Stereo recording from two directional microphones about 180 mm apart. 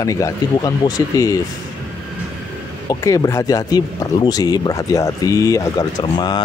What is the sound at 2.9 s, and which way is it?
Speech, 20° left (ahead or behind).